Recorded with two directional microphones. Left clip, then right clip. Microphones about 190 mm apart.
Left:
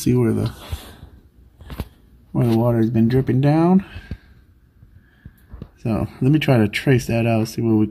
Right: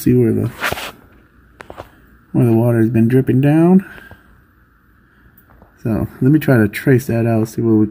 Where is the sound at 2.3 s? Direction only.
10° right (ahead or behind).